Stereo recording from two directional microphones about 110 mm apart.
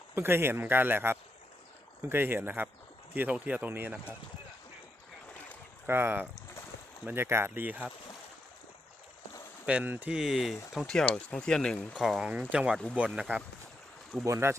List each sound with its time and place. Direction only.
0.1 s speech: 20° right (ahead or behind)
5.8 s speech: 20° right (ahead or behind)
9.6 s speech: 15° right (ahead or behind)
14.3 s speech: 25° right (ahead or behind)